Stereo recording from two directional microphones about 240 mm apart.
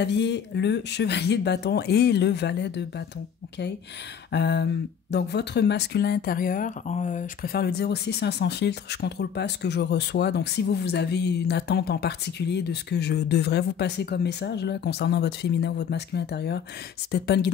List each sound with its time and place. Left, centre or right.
0.0 s speech: left
4.3 s speech: left